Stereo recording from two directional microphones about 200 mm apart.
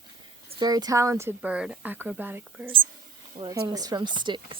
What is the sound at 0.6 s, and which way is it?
Speech, 20° right (ahead or behind).